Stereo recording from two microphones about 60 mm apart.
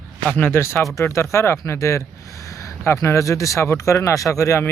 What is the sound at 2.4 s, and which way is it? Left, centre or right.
Speech, left.